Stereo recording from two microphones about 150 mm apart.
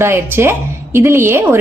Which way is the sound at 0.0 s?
15° right (ahead or behind).